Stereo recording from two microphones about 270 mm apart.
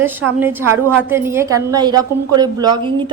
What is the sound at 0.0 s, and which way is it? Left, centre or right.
A woman's voice, centre.